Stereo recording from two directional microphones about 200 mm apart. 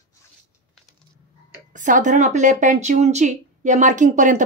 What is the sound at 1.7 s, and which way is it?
Speech, 40° right (ahead or behind).